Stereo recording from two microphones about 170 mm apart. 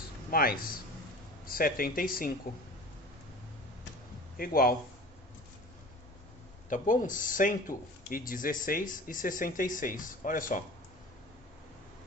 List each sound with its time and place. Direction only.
0.3 s speech: 60° left (ahead or behind)
4.4 s speech: 60° left (ahead or behind)
6.7 s speech: 50° left (ahead or behind)